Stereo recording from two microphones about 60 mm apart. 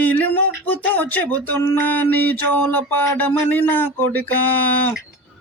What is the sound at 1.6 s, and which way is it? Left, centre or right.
Speech, left.